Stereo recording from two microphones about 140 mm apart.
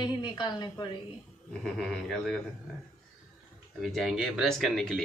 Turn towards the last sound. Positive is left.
turn(degrees=5)  # may be behind; listen again after turning